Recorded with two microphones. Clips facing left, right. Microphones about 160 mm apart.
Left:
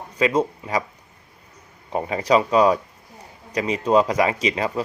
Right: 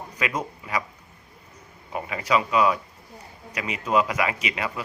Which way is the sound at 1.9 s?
35° left (ahead or behind).